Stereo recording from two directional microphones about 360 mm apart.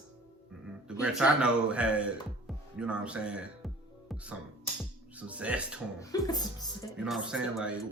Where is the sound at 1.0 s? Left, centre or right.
Centre.